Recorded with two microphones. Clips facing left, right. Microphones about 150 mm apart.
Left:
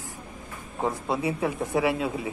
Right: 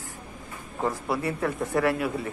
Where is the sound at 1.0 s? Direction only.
20° left (ahead or behind).